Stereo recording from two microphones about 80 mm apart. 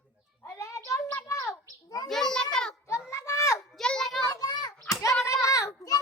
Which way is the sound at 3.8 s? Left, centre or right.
Centre.